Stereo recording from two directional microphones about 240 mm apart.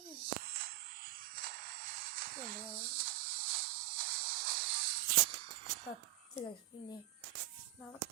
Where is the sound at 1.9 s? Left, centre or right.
Right.